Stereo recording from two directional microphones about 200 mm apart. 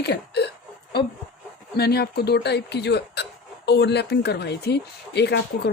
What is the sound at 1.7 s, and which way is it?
Speech, 50° left (ahead or behind).